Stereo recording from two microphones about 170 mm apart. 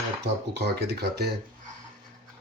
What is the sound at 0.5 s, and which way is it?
Speech, 75° right (ahead or behind).